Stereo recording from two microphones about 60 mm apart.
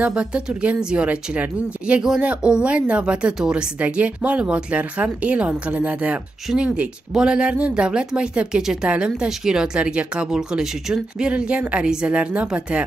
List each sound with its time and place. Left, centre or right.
0.0 s speech: centre
5.7 s speech: right
6.5 s speech: centre